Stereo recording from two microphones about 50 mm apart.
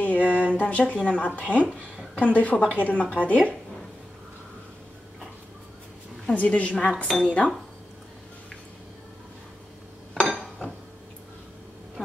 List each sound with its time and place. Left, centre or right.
0.2 s a sound: right
0.6 s a woman's voice: left
6.3 s a woman's voice: left
10.1 s dishes: centre